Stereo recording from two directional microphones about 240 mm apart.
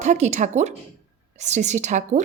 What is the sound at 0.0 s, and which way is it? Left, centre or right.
Speech, right.